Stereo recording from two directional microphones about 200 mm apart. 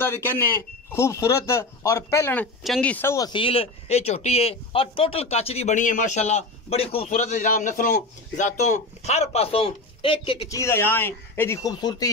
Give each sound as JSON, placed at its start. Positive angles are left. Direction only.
{"t": 0.0, "sound": "speech", "side_deg": 10}
{"t": 10.6, "sound": "speech", "side_deg": 10}